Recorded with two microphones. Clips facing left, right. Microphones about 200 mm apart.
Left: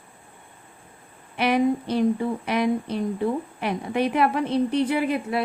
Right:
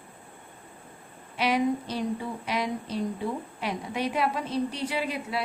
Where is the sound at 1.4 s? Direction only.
55° left (ahead or behind).